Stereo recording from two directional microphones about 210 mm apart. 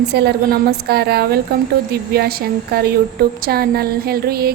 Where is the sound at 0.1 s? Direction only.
50° right (ahead or behind).